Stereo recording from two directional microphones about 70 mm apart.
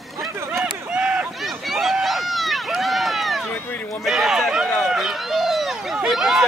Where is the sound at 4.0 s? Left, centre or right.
Centre.